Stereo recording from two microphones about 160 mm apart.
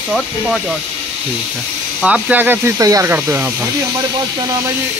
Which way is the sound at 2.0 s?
5° right (ahead or behind).